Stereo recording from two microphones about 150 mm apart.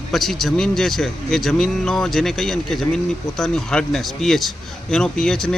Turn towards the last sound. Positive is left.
turn(degrees=5)  # may be behind; listen again after turning